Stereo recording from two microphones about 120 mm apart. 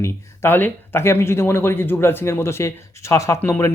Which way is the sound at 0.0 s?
20° left (ahead or behind).